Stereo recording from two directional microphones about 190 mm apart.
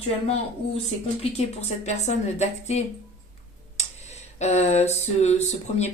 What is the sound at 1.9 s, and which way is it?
Speech, 35° left (ahead or behind).